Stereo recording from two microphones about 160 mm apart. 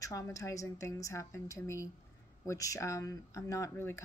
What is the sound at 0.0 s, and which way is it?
Speech, 20° left (ahead or behind).